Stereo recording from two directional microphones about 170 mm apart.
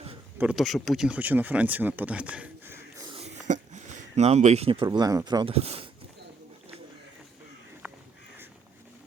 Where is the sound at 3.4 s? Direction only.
45° right (ahead or behind).